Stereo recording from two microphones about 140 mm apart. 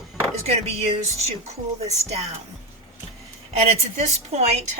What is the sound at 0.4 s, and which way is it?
A woman's voice, 50° right (ahead or behind).